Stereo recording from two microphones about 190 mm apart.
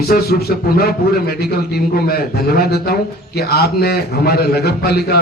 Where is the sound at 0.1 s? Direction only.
55° left (ahead or behind).